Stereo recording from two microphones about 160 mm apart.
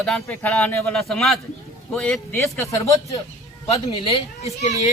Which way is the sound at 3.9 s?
35° left (ahead or behind).